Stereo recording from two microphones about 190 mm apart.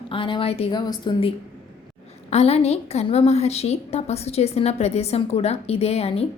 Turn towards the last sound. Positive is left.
turn(degrees=35)  # may be behind; listen again after turning